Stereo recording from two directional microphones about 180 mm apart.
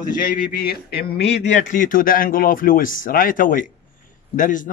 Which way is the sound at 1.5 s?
45° left (ahead or behind).